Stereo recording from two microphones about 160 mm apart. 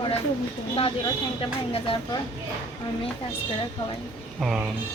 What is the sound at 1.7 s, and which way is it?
Speech, 35° left (ahead or behind).